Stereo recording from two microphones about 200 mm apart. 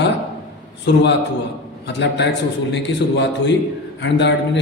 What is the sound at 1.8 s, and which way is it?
A man's voice, 60° left (ahead or behind).